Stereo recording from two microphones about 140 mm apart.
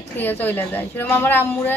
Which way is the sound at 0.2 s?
15° left (ahead or behind).